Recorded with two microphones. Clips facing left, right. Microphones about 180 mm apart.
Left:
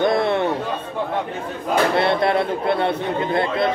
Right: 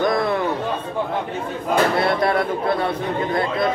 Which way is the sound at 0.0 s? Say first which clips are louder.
Left 1 dB; 25° left (ahead or behind).